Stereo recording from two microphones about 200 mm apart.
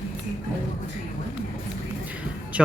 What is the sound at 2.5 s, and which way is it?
Music, 5° right (ahead or behind).